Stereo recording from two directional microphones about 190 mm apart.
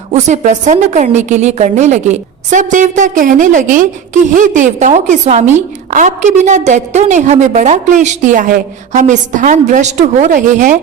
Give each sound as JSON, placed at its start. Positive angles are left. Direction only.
{"t": 0.1, "sound": "a woman's voice", "side_deg": -40}